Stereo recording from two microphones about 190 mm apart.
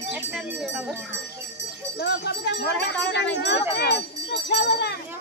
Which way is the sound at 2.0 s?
60° left (ahead or behind).